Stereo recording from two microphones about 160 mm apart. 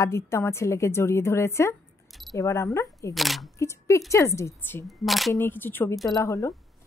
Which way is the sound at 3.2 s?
Centre (ahead or behind).